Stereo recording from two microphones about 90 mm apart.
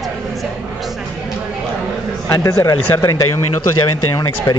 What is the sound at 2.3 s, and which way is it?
Speech, 40° left (ahead or behind).